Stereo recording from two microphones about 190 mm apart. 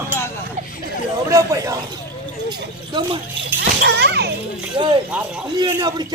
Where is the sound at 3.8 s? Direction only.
65° right (ahead or behind).